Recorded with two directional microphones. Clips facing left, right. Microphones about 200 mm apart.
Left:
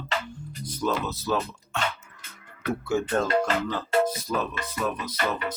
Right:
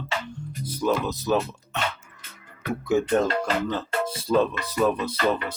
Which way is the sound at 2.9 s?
20° right (ahead or behind).